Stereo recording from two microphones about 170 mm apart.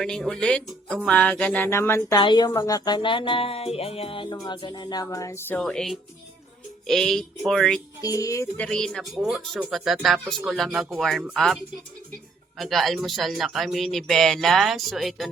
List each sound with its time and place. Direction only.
0.0 s speech: 5° left (ahead or behind); by 2.5 s 25° left (ahead or behind)
2.5 s music: 20° left (ahead or behind)
4.4 s speech: 25° left (ahead or behind); by 7.8 s centre (ahead or behind)
8.0 s speech: 20° left (ahead or behind); by 15.3 s centre (ahead or behind)